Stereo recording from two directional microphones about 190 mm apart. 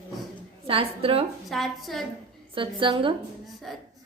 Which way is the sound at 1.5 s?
Centre (ahead or behind).